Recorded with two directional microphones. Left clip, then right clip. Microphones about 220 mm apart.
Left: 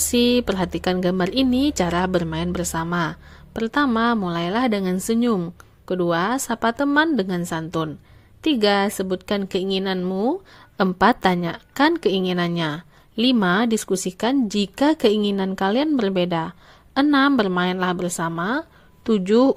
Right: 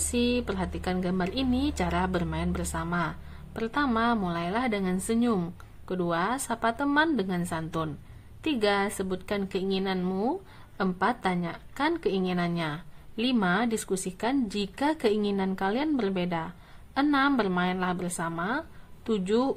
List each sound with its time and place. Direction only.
0.1 s a woman's voice: 35° left (ahead or behind)